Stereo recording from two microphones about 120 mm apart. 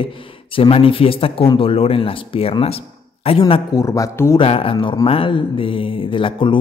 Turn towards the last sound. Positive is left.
turn(degrees=45)  # may be behind; listen again after turning